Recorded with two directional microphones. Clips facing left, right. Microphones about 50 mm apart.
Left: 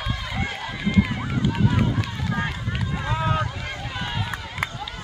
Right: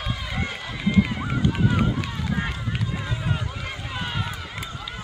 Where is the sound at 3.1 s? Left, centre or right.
Left.